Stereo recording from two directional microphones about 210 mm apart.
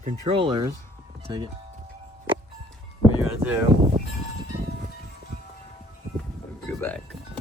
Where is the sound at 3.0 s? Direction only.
10° right (ahead or behind).